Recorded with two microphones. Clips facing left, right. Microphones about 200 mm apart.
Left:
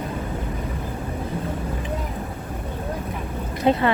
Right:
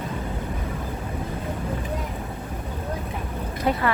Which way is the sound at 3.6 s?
25° left (ahead or behind).